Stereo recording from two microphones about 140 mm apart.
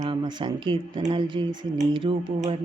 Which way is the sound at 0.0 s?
35° right (ahead or behind).